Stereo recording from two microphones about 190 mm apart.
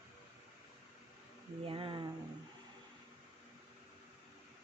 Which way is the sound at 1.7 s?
25° right (ahead or behind).